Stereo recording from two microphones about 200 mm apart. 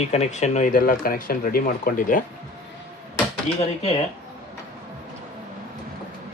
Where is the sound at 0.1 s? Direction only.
35° left (ahead or behind).